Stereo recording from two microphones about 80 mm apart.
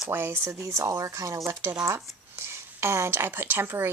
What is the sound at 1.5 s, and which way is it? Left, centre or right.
Speech, right.